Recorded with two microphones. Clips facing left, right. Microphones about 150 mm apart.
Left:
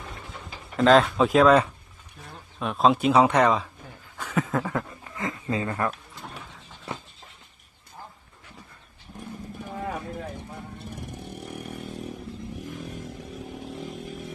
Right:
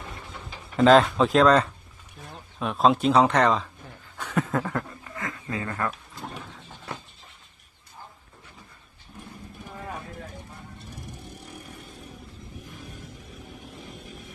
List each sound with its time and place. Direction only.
0.8 s speech: centre (ahead or behind)
5.1 s speech: 20° left (ahead or behind)